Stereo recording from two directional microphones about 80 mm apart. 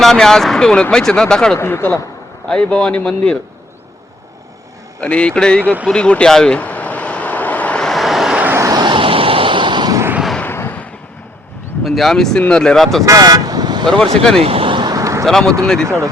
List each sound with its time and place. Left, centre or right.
0.0 s speech: centre
1.5 s speech: left
2.5 s speech: centre
4.9 s speech: centre
5.9 s vehicle: centre
7.9 s vehicle: centre
8.7 s vehicle: right
10.4 s a sound: left
11.8 s speech: centre
13.1 s speech: right
13.8 s speech: centre
14.7 s a sound: right
14.9 s a sound: right
15.3 s speech: centre